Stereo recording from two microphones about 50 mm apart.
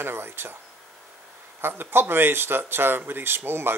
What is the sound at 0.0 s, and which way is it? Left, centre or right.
Speech, right.